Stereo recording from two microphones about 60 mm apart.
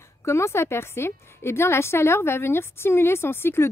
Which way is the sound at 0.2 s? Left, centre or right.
Left.